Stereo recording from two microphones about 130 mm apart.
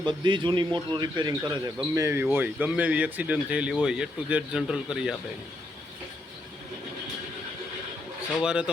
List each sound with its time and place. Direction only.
0.0 s a man's voice: 35° right (ahead or behind)
2.0 s speech: 20° right (ahead or behind)
8.4 s speech: 5° right (ahead or behind)